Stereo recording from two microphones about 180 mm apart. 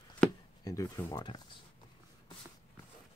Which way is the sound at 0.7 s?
20° left (ahead or behind).